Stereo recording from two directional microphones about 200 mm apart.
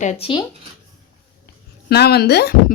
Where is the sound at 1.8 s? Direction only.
55° left (ahead or behind).